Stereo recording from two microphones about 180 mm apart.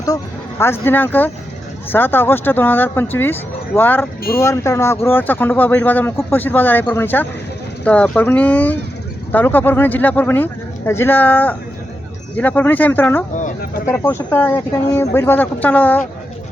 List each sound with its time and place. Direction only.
0.6 s speech: 10° left (ahead or behind)
13.3 s speech: 45° left (ahead or behind)
13.8 s speech: 15° left (ahead or behind)